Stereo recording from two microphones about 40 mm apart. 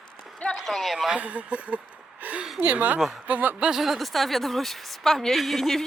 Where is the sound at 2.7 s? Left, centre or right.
Right.